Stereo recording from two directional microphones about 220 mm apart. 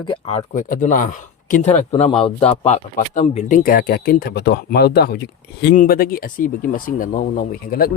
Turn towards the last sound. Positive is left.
turn(degrees=40)  # may be behind; listen again after turning